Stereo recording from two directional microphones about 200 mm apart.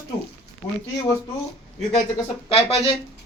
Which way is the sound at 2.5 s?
30° left (ahead or behind).